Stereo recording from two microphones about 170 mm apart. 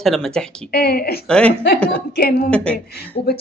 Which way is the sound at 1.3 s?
5° left (ahead or behind).